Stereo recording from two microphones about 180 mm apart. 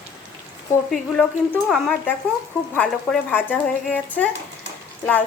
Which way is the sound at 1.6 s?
Centre (ahead or behind).